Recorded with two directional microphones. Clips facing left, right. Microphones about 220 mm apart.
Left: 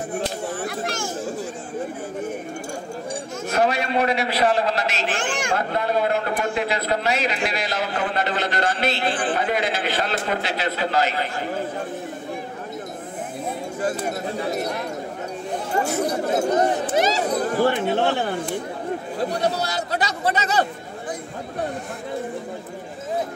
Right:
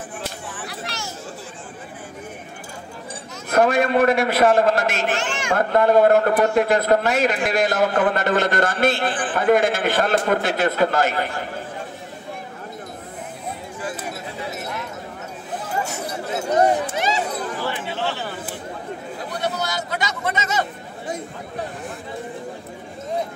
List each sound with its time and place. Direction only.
0.1 s a sound: 45° left (ahead or behind)
3.4 s a man's voice: 50° right (ahead or behind)
5.1 s speech: 50° left (ahead or behind)
5.5 s a man's voice: 50° right (ahead or behind)
13.7 s a sound: 45° left (ahead or behind)
15.8 s speech: 35° left (ahead or behind); by 18.3 s 55° left (ahead or behind)
19.4 s speech: 35° left (ahead or behind)